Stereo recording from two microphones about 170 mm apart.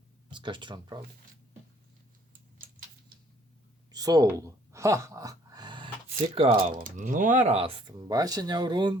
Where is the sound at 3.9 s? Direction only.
20° right (ahead or behind).